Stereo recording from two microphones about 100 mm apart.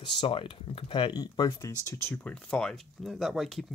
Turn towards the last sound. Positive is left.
turn(degrees=0)  # may be behind; listen again after turning